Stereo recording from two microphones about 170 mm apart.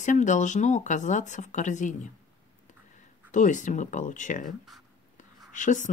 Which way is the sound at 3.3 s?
45° left (ahead or behind).